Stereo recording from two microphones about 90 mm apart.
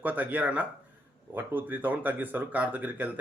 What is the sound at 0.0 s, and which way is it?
Speech, 20° right (ahead or behind).